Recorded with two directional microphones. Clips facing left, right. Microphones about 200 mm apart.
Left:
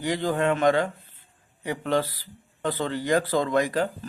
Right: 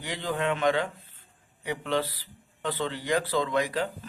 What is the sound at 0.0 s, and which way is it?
A man's voice, 45° left (ahead or behind).